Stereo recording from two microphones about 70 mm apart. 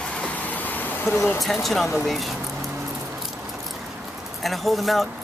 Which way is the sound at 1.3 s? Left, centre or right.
Centre.